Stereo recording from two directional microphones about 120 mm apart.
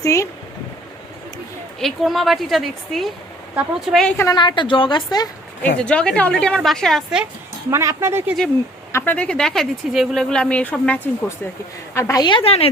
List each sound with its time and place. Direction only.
0.0 s a woman's voice: 25° left (ahead or behind)
1.8 s speech: centre (ahead or behind)
4.4 s a woman's voice: 40° left (ahead or behind)
5.6 s speech: 10° left (ahead or behind)
7.7 s speech: 25° right (ahead or behind)
8.9 s a sound: 20° left (ahead or behind)
9.1 s speech: 10° left (ahead or behind)
11.9 s a woman's voice: 30° left (ahead or behind)
12.3 s a woman's voice: 55° left (ahead or behind)